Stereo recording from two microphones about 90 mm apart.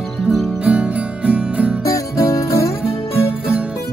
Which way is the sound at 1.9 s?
35° left (ahead or behind).